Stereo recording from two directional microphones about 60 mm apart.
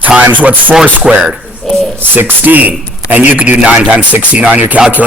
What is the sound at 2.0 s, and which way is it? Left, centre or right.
Speech, right.